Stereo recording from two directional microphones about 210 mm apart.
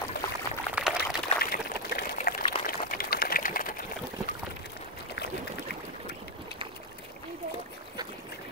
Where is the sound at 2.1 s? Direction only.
45° left (ahead or behind).